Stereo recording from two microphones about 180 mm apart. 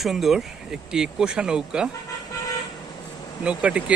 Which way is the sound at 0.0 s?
Centre (ahead or behind).